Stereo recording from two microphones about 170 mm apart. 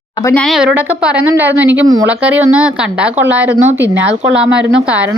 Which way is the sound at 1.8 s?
20° right (ahead or behind).